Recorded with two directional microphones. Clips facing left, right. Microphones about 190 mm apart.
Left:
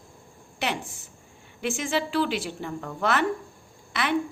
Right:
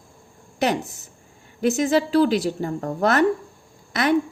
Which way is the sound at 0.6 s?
40° right (ahead or behind).